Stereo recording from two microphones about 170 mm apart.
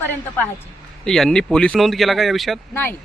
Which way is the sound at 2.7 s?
10° left (ahead or behind).